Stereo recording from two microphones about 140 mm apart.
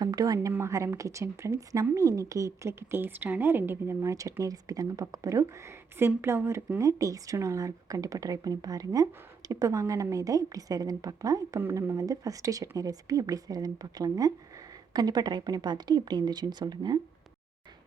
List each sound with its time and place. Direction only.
0.0 s a woman's voice: 25° right (ahead or behind)